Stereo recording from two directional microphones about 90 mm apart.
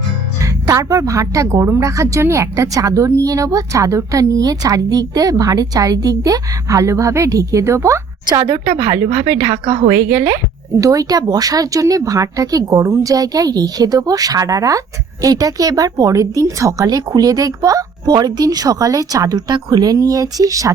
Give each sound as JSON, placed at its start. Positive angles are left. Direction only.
{"t": 0.7, "sound": "a woman's voice", "side_deg": -40}
{"t": 8.4, "sound": "a woman's voice", "side_deg": -45}